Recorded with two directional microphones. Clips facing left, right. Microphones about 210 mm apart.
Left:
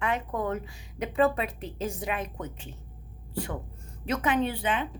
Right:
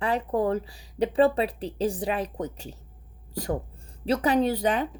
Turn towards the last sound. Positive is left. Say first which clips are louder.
# right 5 dB
turn(degrees=-40)  # may be behind; listen again after turning